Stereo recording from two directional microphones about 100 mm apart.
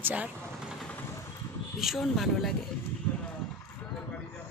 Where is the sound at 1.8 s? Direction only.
Centre (ahead or behind).